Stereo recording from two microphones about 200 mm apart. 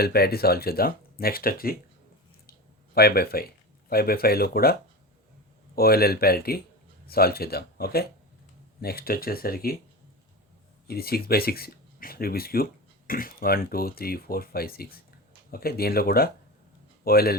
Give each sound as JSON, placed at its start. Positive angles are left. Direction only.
{"t": 0.0, "sound": "speech", "side_deg": 50}
{"t": 2.9, "sound": "speech", "side_deg": 50}
{"t": 10.8, "sound": "speech", "side_deg": 50}